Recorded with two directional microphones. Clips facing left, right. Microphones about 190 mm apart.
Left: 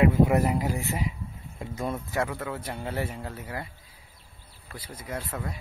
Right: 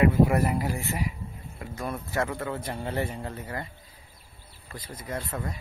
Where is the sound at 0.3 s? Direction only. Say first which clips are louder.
Left 1 dB; 10° left (ahead or behind).